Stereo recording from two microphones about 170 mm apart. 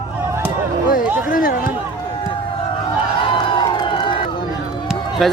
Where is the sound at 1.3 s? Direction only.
55° left (ahead or behind).